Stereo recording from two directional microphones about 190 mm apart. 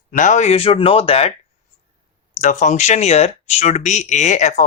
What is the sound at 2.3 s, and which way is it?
Speech, 40° left (ahead or behind).